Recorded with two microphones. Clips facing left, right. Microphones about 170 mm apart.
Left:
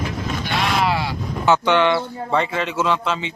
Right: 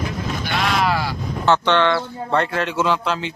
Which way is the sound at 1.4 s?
10° left (ahead or behind).